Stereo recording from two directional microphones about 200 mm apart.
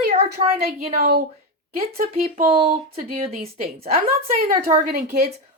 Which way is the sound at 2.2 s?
30° right (ahead or behind).